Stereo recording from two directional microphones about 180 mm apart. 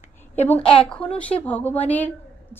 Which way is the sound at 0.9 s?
5° left (ahead or behind).